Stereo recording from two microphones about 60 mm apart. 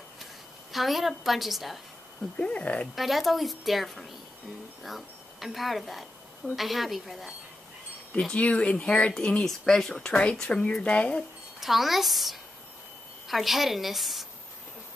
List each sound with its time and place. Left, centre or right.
0.2 s a woman's voice: centre
2.3 s speech: left
3.0 s a woman's voice: centre
8.2 s speech: centre
11.6 s a woman's voice: centre